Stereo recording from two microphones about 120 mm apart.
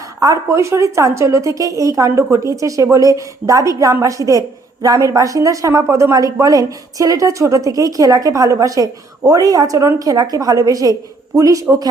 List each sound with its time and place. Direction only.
0.2 s a woman's voice: 25° right (ahead or behind)